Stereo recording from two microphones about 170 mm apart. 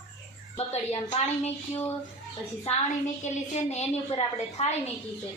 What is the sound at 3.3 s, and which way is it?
A woman's voice, 45° left (ahead or behind).